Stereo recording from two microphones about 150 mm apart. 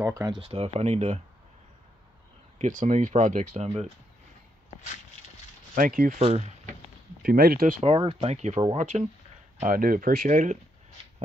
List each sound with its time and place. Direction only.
0.0 s speech: 25° right (ahead or behind)
0.4 s speech: 40° right (ahead or behind)
2.6 s speech: 55° right (ahead or behind)
5.8 s speech: 70° right (ahead or behind)
6.2 s speech: 45° right (ahead or behind)
7.2 s speech: 85° right
7.8 s speech: 40° right (ahead or behind)
9.7 s speech: 75° right (ahead or behind)